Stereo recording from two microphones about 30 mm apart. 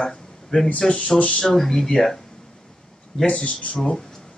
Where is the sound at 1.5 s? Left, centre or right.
Centre.